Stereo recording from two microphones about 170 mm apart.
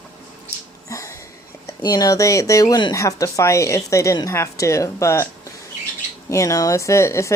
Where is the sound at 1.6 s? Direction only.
20° left (ahead or behind).